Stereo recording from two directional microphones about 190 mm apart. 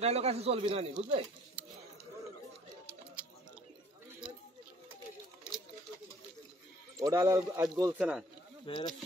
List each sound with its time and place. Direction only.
0.0 s speech: 35° right (ahead or behind)
7.0 s speech: 15° right (ahead or behind)
8.6 s speech: 25° left (ahead or behind)